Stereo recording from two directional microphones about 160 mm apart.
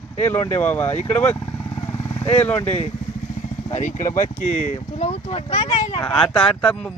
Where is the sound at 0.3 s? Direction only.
15° left (ahead or behind).